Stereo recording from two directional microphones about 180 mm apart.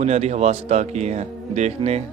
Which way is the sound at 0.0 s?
40° right (ahead or behind).